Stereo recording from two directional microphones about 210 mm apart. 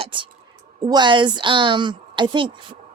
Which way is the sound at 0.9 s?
20° right (ahead or behind).